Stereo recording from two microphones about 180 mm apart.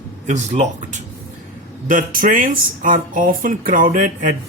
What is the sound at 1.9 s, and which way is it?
Speech, 50° right (ahead or behind).